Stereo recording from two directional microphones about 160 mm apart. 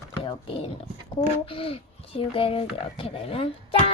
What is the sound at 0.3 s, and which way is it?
A child's voice, 35° left (ahead or behind).